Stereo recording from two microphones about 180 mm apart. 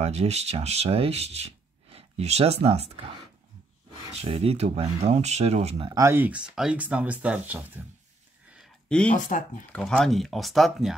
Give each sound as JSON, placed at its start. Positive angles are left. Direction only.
{"t": 0.0, "sound": "speech", "side_deg": -35}
{"t": 4.1, "sound": "speech", "side_deg": -35}
{"t": 5.9, "sound": "speech", "side_deg": -15}
{"t": 8.5, "sound": "a sound", "side_deg": 5}
{"t": 9.1, "sound": "speech", "side_deg": 45}
{"t": 9.7, "sound": "speech", "side_deg": 5}